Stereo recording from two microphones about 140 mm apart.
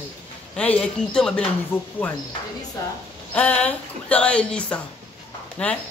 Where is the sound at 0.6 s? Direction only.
5° left (ahead or behind).